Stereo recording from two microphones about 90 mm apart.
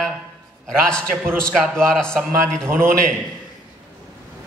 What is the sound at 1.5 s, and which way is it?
A man's voice, 5° left (ahead or behind).